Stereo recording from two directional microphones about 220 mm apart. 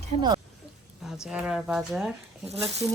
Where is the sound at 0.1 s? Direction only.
30° right (ahead or behind).